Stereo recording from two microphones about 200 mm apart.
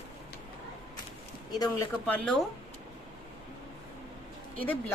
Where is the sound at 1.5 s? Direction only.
20° left (ahead or behind).